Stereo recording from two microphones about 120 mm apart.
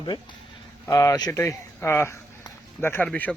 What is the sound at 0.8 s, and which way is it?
Speech, 30° left (ahead or behind).